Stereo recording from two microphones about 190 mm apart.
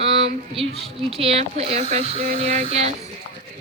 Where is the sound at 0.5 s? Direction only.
30° right (ahead or behind).